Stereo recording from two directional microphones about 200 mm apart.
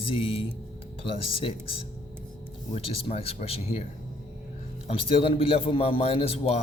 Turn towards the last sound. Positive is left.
turn(degrees=30)  # may be behind; listen again after turning